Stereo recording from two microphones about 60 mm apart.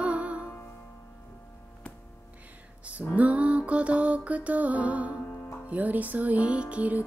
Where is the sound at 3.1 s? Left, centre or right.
Right.